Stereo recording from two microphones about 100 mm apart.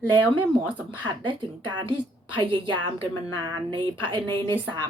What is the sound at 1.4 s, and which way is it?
A woman's voice, 55° right (ahead or behind).